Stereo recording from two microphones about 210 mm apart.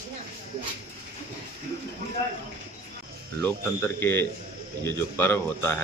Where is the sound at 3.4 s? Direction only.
10° left (ahead or behind).